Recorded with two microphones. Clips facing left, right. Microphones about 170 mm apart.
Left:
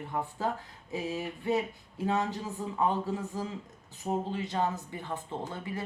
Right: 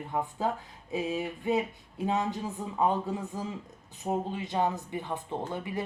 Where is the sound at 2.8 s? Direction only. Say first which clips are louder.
Right 2 dB; 20° right (ahead or behind).